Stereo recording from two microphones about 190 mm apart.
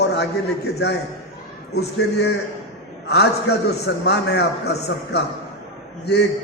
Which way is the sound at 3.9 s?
60° left (ahead or behind).